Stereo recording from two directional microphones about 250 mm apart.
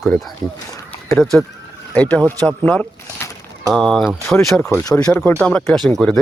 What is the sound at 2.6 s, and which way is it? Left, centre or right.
Speech, centre.